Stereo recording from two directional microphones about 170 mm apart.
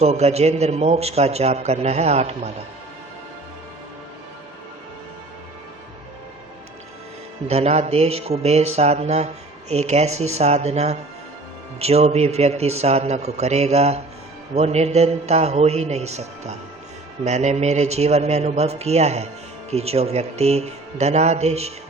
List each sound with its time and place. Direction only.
0.0 s speech: 40° right (ahead or behind)
7.4 s speech: 40° right (ahead or behind)